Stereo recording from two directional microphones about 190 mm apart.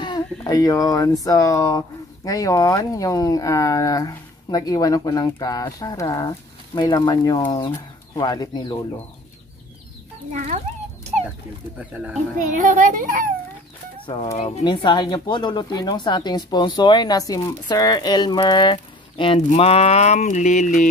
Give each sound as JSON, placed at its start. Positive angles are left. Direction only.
{"t": 0.0, "sound": "speech", "side_deg": 20}
{"t": 10.3, "sound": "speech", "side_deg": -35}
{"t": 11.9, "sound": "speech", "side_deg": -5}
{"t": 12.4, "sound": "speech", "side_deg": -40}
{"t": 14.0, "sound": "speech", "side_deg": 25}
{"t": 14.6, "sound": "speech", "side_deg": 25}